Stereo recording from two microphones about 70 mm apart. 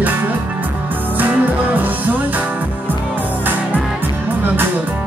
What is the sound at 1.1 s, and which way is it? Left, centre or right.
Music, right.